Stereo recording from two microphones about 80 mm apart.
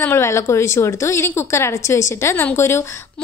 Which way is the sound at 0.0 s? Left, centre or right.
Left.